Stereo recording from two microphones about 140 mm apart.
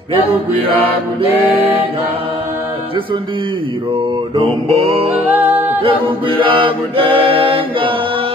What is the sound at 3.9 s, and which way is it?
Mantra, 40° right (ahead or behind).